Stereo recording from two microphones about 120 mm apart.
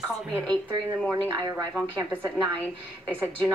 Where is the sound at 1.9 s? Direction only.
15° right (ahead or behind).